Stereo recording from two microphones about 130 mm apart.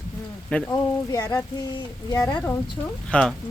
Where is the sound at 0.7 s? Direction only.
25° left (ahead or behind).